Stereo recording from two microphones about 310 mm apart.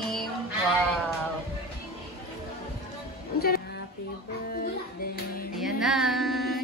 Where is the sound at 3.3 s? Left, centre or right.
Left.